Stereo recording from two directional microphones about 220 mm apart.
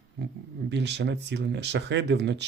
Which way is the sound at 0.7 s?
50° right (ahead or behind).